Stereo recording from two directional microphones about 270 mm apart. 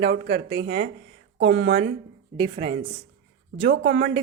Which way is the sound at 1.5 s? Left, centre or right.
Right.